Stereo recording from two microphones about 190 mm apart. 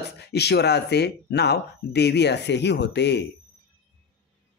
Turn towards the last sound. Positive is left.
turn(degrees=65)  # may be behind; listen again after turning